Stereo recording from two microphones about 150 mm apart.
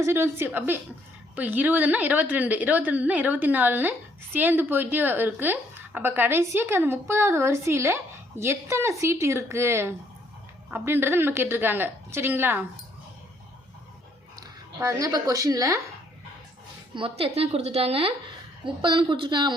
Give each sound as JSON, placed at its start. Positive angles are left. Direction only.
{"t": 0.0, "sound": "a woman's voice", "side_deg": -15}
{"t": 14.8, "sound": "a woman's voice", "side_deg": -20}
{"t": 16.9, "sound": "a woman's voice", "side_deg": -35}